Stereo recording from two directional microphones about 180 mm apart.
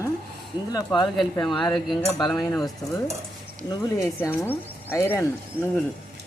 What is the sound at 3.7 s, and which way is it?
Speech, 20° left (ahead or behind).